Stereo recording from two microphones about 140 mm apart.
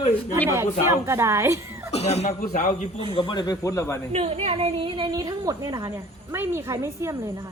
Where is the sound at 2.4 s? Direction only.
60° left (ahead or behind).